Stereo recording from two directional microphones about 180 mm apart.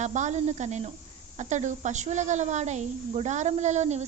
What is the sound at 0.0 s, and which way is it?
A woman's voice, 40° right (ahead or behind).